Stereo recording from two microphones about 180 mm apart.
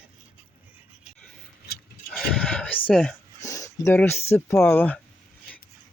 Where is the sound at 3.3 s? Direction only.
15° left (ahead or behind).